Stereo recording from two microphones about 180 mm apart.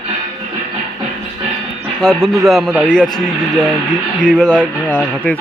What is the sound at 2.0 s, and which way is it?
A man's voice, centre (ahead or behind).